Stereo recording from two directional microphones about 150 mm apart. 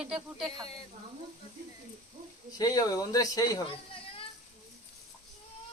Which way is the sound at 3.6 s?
40° left (ahead or behind).